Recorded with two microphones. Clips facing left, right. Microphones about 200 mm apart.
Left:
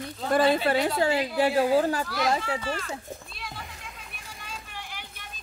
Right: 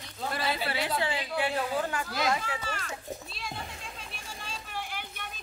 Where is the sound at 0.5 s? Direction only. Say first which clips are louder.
Left 7 dB; 50° left (ahead or behind); by 2.7 s 30° left (ahead or behind).